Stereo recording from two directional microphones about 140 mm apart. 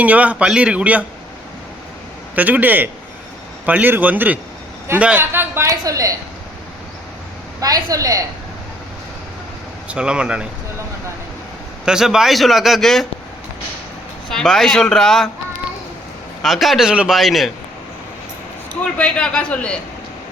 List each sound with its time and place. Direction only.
0.0 s a man's voice: 10° right (ahead or behind)
2.3 s a man's voice: 10° right (ahead or behind)
7.6 s a woman's voice: 25° right (ahead or behind)
9.9 s a man's voice: 5° right (ahead or behind)
11.9 s speech: 5° right (ahead or behind)
14.3 s speech: 5° left (ahead or behind)
16.4 s speech: centre (ahead or behind)
18.9 s a man's voice: 10° left (ahead or behind)